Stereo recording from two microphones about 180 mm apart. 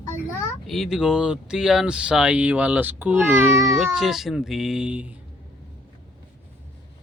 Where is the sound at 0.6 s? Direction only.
Centre (ahead or behind).